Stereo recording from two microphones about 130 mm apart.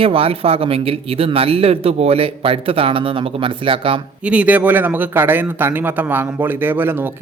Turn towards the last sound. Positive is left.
turn(degrees=-15)  # may be behind; listen again after turning